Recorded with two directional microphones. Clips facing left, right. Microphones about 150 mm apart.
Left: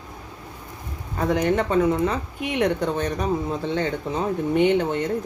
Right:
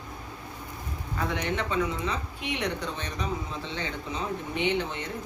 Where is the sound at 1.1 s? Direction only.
40° left (ahead or behind).